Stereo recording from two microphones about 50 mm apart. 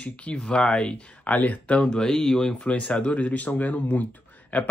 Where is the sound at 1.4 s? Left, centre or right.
Left.